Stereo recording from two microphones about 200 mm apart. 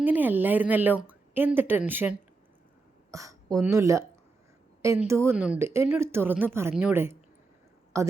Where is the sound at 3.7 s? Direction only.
15° right (ahead or behind).